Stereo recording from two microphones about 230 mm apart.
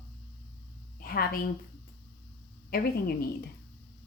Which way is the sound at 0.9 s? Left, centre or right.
Left.